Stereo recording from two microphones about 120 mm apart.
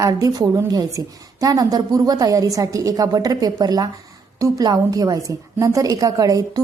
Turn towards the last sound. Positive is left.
turn(degrees=-30)  # may be behind; listen again after turning